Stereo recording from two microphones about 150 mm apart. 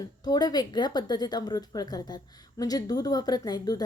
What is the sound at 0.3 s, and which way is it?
Speech, 25° left (ahead or behind).